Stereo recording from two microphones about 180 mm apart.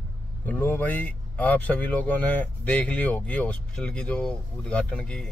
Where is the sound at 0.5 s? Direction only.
10° left (ahead or behind).